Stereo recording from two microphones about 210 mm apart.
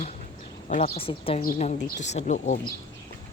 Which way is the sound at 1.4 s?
35° left (ahead or behind).